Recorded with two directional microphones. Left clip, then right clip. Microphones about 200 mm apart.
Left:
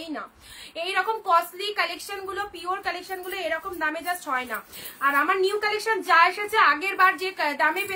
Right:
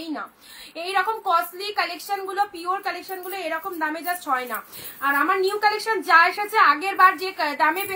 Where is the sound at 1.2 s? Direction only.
20° left (ahead or behind).